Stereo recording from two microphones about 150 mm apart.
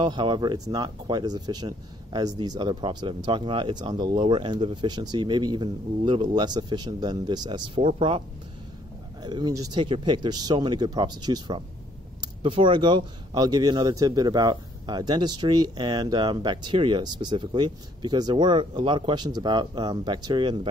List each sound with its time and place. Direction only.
0.0 s speech: 30° right (ahead or behind)
9.2 s speech: 30° right (ahead or behind)